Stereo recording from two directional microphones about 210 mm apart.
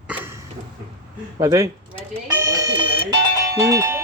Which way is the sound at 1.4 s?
15° right (ahead or behind).